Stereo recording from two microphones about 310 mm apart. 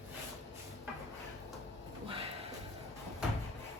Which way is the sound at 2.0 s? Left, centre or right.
Centre.